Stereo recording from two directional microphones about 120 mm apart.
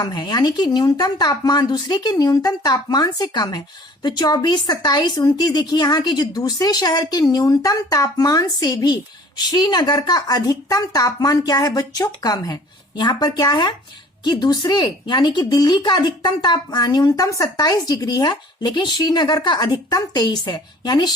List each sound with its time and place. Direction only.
0.0 s speech: 35° left (ahead or behind)